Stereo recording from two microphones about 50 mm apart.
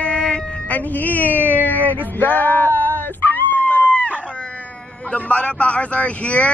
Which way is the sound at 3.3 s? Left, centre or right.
Left.